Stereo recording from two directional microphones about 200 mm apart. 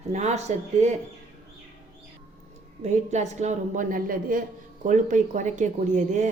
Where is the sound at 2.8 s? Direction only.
35° right (ahead or behind).